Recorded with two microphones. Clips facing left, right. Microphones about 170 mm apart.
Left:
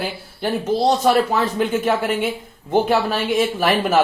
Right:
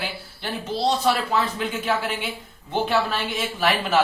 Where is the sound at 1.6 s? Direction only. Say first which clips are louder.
Left 6 dB; 50° left (ahead or behind).